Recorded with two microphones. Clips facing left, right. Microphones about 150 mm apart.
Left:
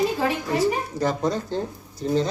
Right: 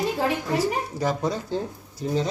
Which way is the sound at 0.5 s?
10° right (ahead or behind).